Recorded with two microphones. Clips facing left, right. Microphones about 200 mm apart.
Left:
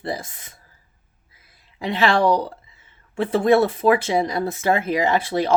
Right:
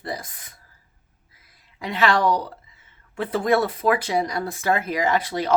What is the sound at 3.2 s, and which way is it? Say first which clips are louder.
Speech: left 4 dB; 30° left (ahead or behind).